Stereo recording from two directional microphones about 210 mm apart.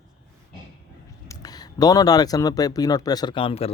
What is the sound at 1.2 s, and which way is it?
Speech, 20° left (ahead or behind).